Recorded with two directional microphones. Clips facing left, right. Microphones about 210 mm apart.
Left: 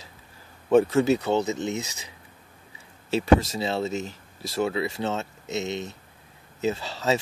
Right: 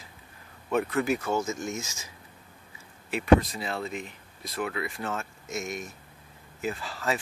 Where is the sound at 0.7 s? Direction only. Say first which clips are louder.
Left 7 dB; 25° left (ahead or behind).